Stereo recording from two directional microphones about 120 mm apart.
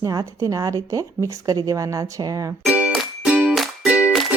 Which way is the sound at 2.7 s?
10° right (ahead or behind).